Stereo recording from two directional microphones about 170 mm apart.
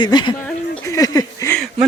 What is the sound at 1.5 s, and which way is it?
Speech, centre (ahead or behind).